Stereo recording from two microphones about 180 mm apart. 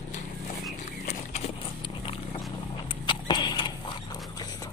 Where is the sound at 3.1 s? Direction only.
25° left (ahead or behind).